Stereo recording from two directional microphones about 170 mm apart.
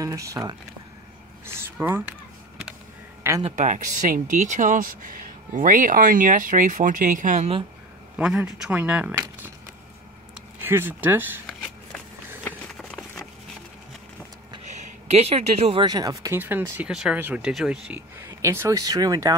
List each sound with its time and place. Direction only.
0.0 s speech: 20° right (ahead or behind)
1.4 s a sound: 15° right (ahead or behind)
3.4 s speech: 45° right (ahead or behind)
8.2 s speech: 5° right (ahead or behind)
10.6 s speech: 15° right (ahead or behind)
12.4 s run: 5° left (ahead or behind)
14.7 s speech: 40° right (ahead or behind); by 16.3 s 20° right (ahead or behind)
16.3 s speech: 10° right (ahead or behind)
18.2 s speech: 15° right (ahead or behind)